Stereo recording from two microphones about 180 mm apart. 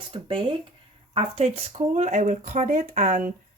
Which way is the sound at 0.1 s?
30° right (ahead or behind).